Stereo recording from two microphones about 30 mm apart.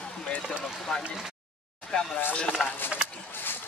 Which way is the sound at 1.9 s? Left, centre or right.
Left.